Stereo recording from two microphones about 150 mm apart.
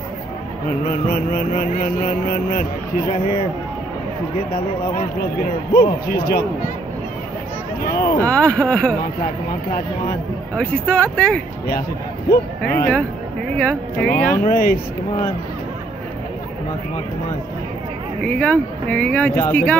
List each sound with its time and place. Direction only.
0.8 s a sound: 60° left (ahead or behind)
5.2 s a man's voice: 90° left
8.0 s speech: 15° left (ahead or behind)
10.5 s speech: 10° left (ahead or behind)
12.6 s speech: 10° left (ahead or behind)
14.4 s speech: 75° left (ahead or behind)
18.2 s speech: 10° left (ahead or behind)